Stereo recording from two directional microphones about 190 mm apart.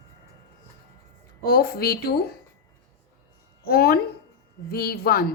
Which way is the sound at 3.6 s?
55° left (ahead or behind).